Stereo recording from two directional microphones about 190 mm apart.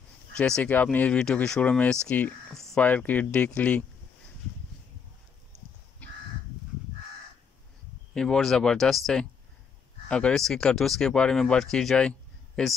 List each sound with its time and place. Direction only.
0.4 s speech: 5° left (ahead or behind)
8.1 s speech: 5° left (ahead or behind)